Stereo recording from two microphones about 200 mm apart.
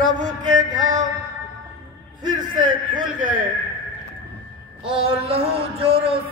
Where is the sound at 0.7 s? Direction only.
40° right (ahead or behind).